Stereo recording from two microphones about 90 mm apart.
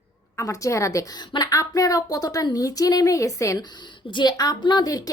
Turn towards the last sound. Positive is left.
turn(degrees=45)  # may be behind; listen again after turning